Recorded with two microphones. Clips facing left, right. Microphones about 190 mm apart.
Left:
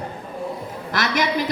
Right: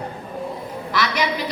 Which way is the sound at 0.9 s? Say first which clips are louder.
Even; 50° left (ahead or behind).